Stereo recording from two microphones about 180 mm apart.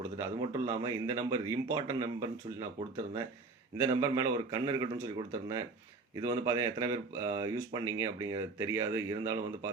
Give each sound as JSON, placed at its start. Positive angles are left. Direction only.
{"t": 0.0, "sound": "speech", "side_deg": -15}
{"t": 3.8, "sound": "a man's voice", "side_deg": -20}